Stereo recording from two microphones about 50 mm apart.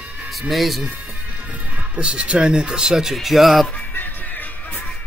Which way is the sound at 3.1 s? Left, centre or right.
Centre.